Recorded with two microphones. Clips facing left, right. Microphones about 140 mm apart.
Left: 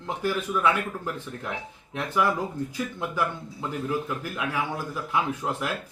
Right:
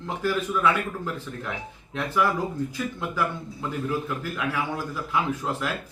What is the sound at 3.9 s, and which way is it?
Speech, 15° left (ahead or behind).